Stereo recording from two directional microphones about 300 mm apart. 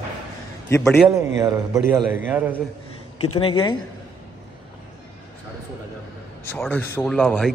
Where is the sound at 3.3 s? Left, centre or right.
Centre.